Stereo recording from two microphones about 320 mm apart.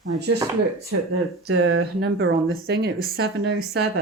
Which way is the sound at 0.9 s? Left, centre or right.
Right.